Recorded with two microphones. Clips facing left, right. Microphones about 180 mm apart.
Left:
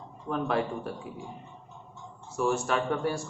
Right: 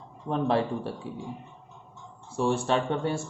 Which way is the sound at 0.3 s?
30° right (ahead or behind).